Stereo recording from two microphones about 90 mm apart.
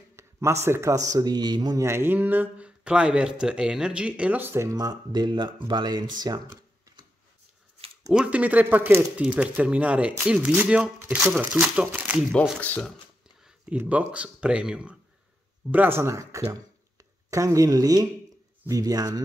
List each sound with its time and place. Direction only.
0.1 s speech: 30° right (ahead or behind)
1.9 s speech: 25° right (ahead or behind)
2.8 s speech: 10° right (ahead or behind)
4.4 s speech: 25° right (ahead or behind)
4.6 s speech: 45° right (ahead or behind)
8.1 s speech: 10° right (ahead or behind)
12.5 s speech: 20° left (ahead or behind)
13.7 s speech: 15° right (ahead or behind)
15.7 s speech: 25° right (ahead or behind); by 19.2 s 45° right (ahead or behind)